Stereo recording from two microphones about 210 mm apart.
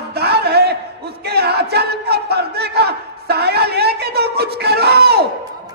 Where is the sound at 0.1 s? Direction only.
50° right (ahead or behind).